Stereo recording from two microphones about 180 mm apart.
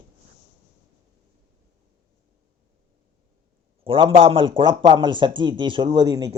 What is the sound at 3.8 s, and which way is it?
Speech, 30° right (ahead or behind).